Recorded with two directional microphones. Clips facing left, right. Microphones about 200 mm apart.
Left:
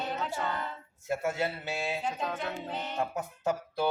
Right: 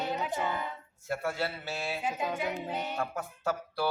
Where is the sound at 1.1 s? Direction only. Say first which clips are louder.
Left 2 dB; 20° left (ahead or behind).